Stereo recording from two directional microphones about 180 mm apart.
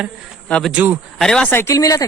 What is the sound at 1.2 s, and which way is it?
Speech, 5° left (ahead or behind).